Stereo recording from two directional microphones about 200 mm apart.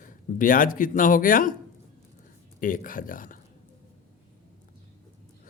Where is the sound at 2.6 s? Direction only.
45° left (ahead or behind).